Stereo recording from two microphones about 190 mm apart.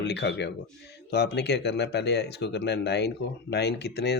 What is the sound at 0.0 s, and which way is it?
Speech, 65° left (ahead or behind).